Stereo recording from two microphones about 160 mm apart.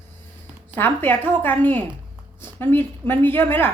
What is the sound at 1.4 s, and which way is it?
A woman's voice, 10° left (ahead or behind).